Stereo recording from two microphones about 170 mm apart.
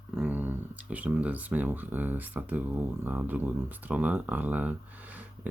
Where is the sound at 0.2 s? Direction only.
10° right (ahead or behind).